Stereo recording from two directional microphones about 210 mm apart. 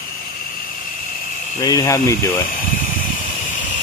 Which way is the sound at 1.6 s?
15° left (ahead or behind).